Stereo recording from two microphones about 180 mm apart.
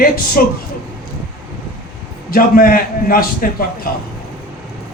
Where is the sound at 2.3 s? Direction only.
55° left (ahead or behind).